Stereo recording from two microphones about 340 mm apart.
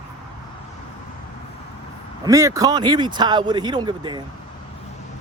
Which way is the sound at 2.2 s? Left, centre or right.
Centre.